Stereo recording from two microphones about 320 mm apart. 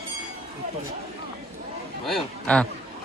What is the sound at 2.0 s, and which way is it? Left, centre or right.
Speech, centre.